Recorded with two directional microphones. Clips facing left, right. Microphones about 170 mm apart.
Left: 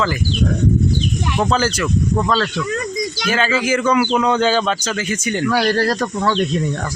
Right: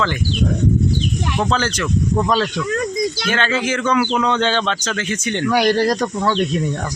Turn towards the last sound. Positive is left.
turn(degrees=-15)  # may be behind; listen again after turning